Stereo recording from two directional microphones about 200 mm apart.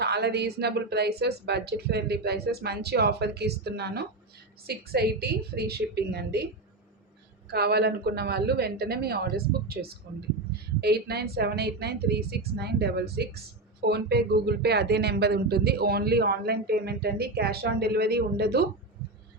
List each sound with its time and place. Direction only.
0.0 s a woman's voice: 55° right (ahead or behind)
7.5 s a woman's voice: 55° right (ahead or behind)